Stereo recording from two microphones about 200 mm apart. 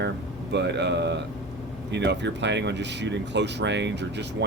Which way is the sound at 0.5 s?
60° right (ahead or behind).